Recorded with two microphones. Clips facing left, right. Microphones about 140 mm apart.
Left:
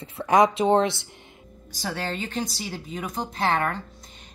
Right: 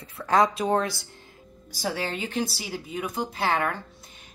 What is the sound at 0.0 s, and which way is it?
Speech, 20° left (ahead or behind).